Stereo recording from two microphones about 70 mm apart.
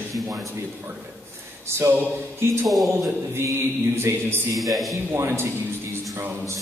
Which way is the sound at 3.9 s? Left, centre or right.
Right.